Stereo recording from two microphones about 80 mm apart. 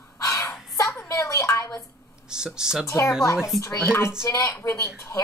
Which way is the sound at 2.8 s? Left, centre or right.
Left.